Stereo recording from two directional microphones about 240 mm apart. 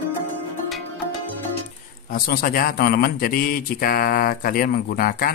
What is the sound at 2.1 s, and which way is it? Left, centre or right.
Speech, left.